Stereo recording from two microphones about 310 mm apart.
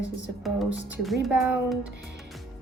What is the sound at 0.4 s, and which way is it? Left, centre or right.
Speech, centre.